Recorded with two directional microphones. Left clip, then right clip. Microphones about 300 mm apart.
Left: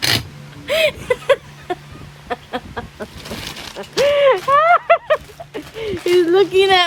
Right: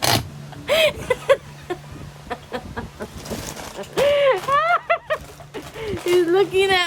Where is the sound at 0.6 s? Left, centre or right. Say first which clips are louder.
Left 1 dB; centre.